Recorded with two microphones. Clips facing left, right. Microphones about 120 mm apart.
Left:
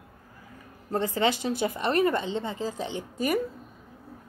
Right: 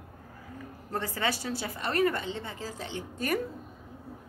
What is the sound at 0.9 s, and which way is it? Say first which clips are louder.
A woman's voice: left 6 dB; 20° left (ahead or behind).